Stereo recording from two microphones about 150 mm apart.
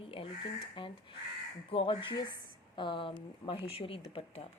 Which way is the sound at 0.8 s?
35° left (ahead or behind).